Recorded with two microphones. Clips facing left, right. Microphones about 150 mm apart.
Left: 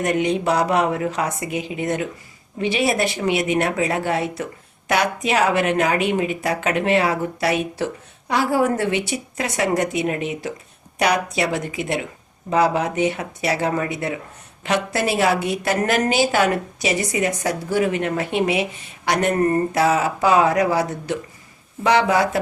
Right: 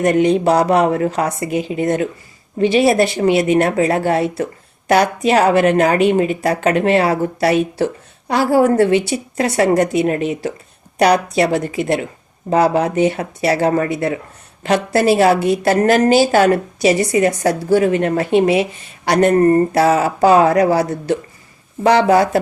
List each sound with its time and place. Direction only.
0.0 s a woman's voice: 35° right (ahead or behind)